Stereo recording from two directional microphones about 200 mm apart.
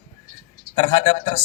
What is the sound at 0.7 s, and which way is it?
Speech, 25° left (ahead or behind).